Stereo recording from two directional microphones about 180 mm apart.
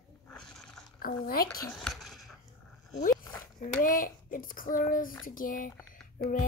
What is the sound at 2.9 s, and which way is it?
Child singing, 50° left (ahead or behind).